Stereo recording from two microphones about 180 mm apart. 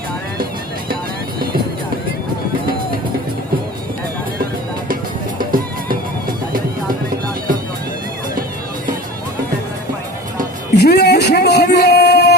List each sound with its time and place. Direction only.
5.4 s music: 50° right (ahead or behind)
10.8 s music: 65° left (ahead or behind)